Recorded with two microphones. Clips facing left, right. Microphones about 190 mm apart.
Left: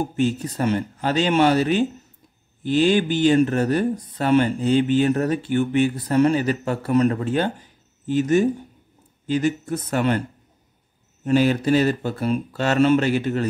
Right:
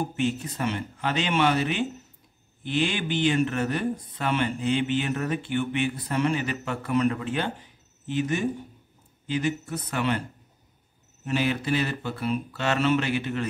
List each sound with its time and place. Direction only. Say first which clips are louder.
0.0 s speech: left 5 dB; 40° left (ahead or behind)
11.2 s speech: left 8 dB; 40° left (ahead or behind)